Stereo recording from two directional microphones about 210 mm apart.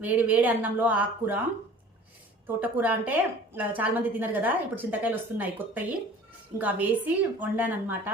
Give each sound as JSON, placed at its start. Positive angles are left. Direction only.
{"t": 0.0, "sound": "a woman's voice", "side_deg": -10}
{"t": 2.6, "sound": "a woman's voice", "side_deg": -10}